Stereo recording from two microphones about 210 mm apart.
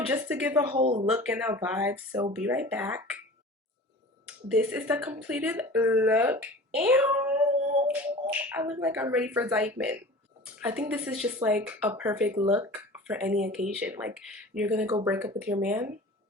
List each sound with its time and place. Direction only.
0.1 s speech: 10° right (ahead or behind)
0.8 s speech: 30° right (ahead or behind)
1.1 s speech: 5° right (ahead or behind)
4.3 s speech: 5° right (ahead or behind)